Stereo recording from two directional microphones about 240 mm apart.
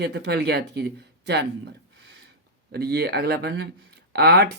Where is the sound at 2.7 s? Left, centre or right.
Right.